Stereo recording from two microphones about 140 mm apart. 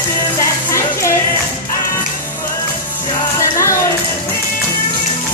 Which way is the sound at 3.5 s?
20° left (ahead or behind).